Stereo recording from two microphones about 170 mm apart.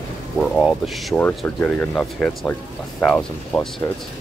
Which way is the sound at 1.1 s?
10° left (ahead or behind).